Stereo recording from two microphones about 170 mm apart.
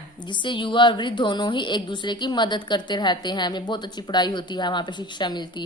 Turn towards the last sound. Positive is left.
turn(degrees=25)  # may be behind; listen again after turning